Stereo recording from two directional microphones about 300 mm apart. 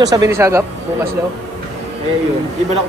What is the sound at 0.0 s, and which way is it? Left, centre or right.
Speech, centre.